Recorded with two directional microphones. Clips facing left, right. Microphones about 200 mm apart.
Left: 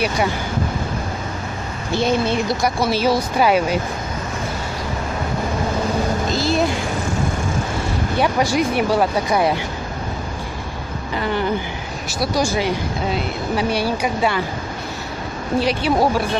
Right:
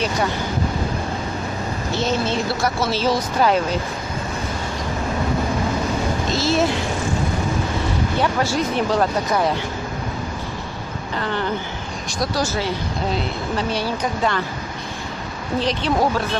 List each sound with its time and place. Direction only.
2.0 s speech: 15° left (ahead or behind)
6.3 s speech: centre (ahead or behind)
8.2 s speech: 15° left (ahead or behind)
11.1 s speech: 15° left (ahead or behind)
15.6 s speech: 10° left (ahead or behind)